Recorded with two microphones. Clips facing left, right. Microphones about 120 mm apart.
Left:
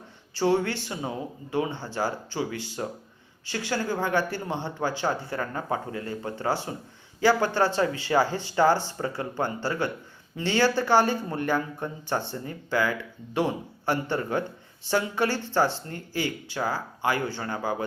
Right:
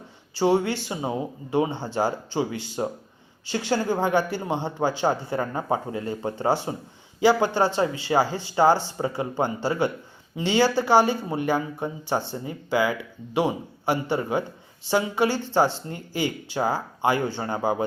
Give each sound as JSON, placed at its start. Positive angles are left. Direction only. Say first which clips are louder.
{"t": 0.3, "sound": "speech", "louder": "right 3 dB", "side_deg": -15}